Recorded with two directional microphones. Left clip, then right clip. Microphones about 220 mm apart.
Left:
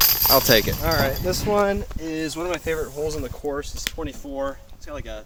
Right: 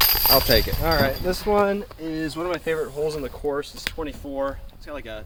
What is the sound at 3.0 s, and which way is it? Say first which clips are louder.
Speech: right 1 dB; 15° left (ahead or behind).